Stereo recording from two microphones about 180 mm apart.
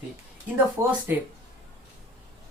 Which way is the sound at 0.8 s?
15° right (ahead or behind).